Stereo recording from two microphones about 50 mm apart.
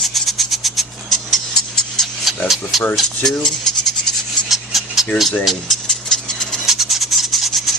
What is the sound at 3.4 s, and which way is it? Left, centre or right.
Speech, centre.